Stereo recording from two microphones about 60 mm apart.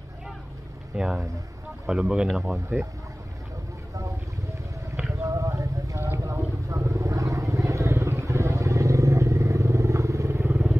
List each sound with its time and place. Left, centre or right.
0.9 s speech: centre
5.2 s a sound: right
6.3 s vehicle: right